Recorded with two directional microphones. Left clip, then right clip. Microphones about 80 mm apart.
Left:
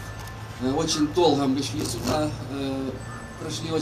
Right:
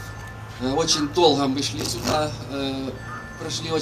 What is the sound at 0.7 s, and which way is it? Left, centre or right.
Speech, centre.